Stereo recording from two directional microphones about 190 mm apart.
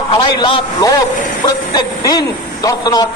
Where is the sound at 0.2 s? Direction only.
25° left (ahead or behind).